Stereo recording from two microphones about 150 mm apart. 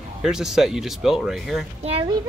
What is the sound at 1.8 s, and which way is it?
Speech, 40° right (ahead or behind).